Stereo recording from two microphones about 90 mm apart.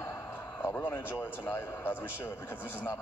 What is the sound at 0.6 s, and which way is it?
Speech, 20° left (ahead or behind).